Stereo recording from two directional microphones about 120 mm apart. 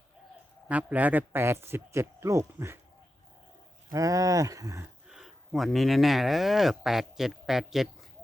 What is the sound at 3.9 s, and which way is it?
Speech, 30° right (ahead or behind).